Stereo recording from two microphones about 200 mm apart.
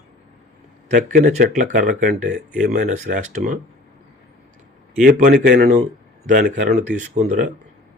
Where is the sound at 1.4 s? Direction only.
40° right (ahead or behind).